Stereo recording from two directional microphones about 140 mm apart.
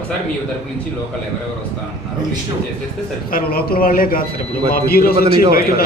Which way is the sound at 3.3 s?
90° left.